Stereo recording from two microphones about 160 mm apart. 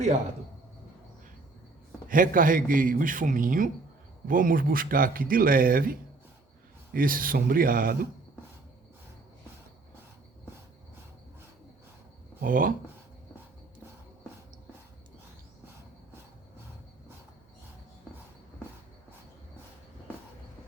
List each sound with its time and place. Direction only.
2.0 s speech: 60° right (ahead or behind)
12.4 s speech: 60° right (ahead or behind)